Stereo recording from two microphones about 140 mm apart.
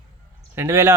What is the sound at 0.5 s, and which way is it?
Speech, 20° right (ahead or behind).